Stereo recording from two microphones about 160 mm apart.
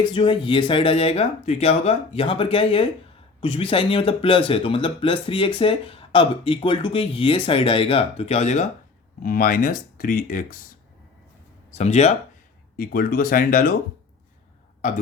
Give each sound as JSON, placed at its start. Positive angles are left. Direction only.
{"t": 0.0, "sound": "speech", "side_deg": 30}
{"t": 9.2, "sound": "speech", "side_deg": 60}
{"t": 11.7, "sound": "speech", "side_deg": 45}
{"t": 12.7, "sound": "speech", "side_deg": 65}